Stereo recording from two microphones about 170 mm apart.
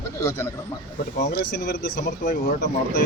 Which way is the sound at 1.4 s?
65° left (ahead or behind).